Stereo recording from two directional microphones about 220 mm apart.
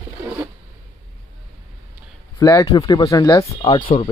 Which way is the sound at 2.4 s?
15° left (ahead or behind).